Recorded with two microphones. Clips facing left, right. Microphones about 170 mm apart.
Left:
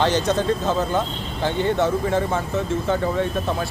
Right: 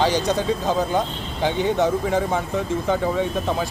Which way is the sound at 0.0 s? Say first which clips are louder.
Even; 10° right (ahead or behind).